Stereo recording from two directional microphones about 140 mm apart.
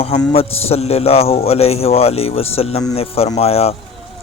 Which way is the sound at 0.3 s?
45° left (ahead or behind).